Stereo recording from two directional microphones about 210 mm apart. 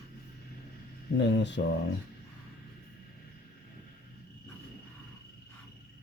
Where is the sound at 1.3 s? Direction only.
55° left (ahead or behind).